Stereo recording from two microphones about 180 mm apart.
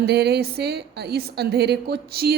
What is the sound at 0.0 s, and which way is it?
A woman's voice, 65° right (ahead or behind).